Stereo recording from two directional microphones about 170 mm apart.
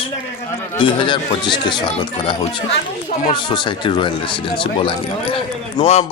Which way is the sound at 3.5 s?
25° left (ahead or behind).